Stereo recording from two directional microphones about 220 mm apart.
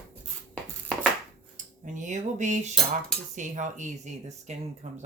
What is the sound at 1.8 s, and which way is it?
Cutlery, 35° right (ahead or behind).